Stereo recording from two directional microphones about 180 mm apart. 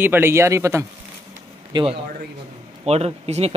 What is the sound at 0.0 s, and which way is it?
A man's voice, 10° right (ahead or behind).